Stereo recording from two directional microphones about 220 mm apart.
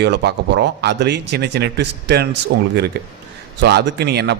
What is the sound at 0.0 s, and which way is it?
Speech, 50° right (ahead or behind).